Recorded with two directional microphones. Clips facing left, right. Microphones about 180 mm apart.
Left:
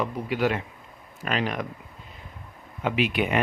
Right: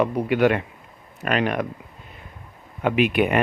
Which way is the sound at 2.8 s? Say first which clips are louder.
Right 5 dB; 55° right (ahead or behind).